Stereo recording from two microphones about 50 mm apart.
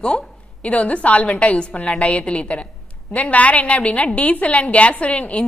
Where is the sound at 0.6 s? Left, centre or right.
Left.